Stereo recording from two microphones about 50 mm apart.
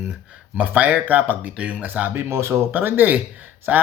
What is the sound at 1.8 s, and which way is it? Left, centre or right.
Speech, right.